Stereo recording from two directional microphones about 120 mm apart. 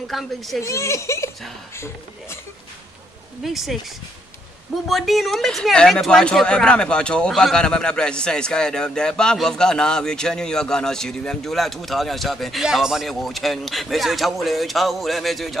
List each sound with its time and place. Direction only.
0.1 s speech: centre (ahead or behind)
0.6 s speech: 25° left (ahead or behind)
3.4 s speech: centre (ahead or behind)
4.8 s speech: centre (ahead or behind)